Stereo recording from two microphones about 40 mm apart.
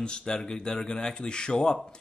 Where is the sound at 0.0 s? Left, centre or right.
Left.